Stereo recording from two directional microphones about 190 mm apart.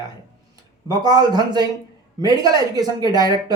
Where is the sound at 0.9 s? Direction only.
20° right (ahead or behind).